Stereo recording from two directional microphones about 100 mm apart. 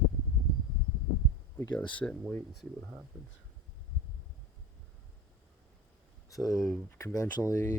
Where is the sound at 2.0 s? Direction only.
10° left (ahead or behind).